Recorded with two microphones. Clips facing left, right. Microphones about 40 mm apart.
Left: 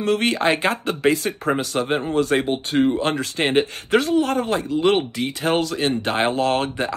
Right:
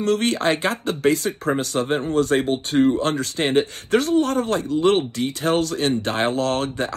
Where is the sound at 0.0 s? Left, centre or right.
Left.